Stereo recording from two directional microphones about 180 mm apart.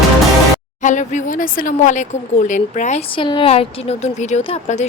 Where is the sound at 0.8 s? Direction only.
45° left (ahead or behind).